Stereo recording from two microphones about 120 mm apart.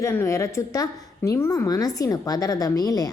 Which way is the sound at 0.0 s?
25° left (ahead or behind).